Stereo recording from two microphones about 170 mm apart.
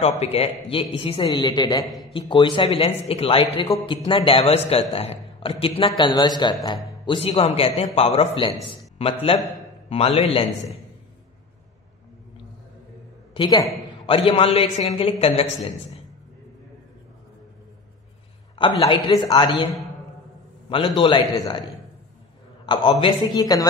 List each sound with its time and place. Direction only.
0.0 s a man's voice: 35° left (ahead or behind)
1.9 s a sound: centre (ahead or behind)
2.1 s a man's voice: 30° left (ahead or behind)
3.6 s a man's voice: 25° left (ahead or behind)
13.3 s a woman's voice: 25° left (ahead or behind)
18.6 s a man's voice: 25° left (ahead or behind)
22.7 s a man's voice: 30° left (ahead or behind)